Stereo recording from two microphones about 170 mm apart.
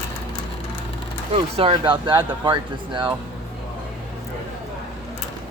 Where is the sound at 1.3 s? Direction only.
35° right (ahead or behind).